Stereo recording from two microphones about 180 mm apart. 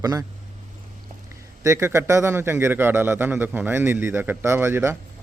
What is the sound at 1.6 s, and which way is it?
A man's voice, 15° right (ahead or behind).